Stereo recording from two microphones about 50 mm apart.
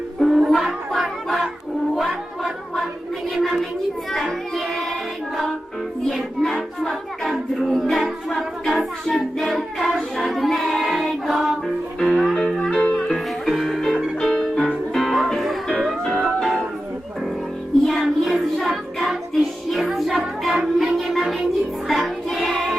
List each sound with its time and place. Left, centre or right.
0.2 s music: centre
4.1 s child singing: centre
6.1 s music: centre
9.5 s child singing: centre
11.9 s music: centre
13.0 s music: centre
14.2 s music: centre
17.8 s music: centre
18.5 s child singing: centre
19.7 s music: centre
21.8 s child singing: centre